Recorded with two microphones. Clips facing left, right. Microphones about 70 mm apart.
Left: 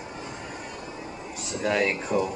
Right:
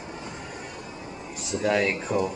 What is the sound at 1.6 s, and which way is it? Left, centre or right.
Speech, centre.